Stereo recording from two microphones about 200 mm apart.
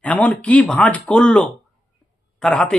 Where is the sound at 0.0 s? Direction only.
5° left (ahead or behind).